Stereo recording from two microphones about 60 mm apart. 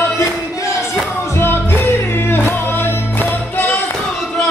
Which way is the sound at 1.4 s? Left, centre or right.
Left.